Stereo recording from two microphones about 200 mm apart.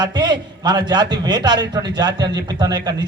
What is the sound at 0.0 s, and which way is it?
A man's voice, 20° right (ahead or behind).